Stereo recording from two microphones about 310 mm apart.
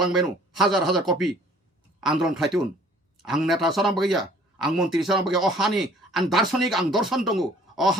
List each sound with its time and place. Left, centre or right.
0.0 s speech: centre